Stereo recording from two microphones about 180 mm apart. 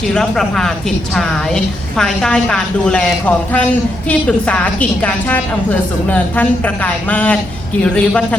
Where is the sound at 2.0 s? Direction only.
5° left (ahead or behind).